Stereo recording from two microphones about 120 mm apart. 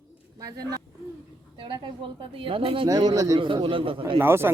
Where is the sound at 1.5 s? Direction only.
45° right (ahead or behind).